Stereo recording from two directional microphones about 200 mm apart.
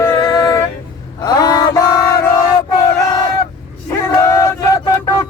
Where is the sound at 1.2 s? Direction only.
20° left (ahead or behind).